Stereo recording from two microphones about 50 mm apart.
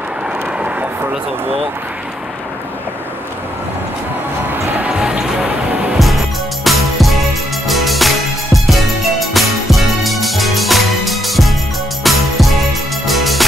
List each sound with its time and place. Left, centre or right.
0.6 s vehicle: right
4.5 s music: right
4.8 s music: right
5.9 s music: centre